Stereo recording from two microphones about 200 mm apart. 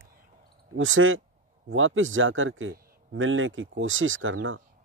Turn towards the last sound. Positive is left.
turn(degrees=-80)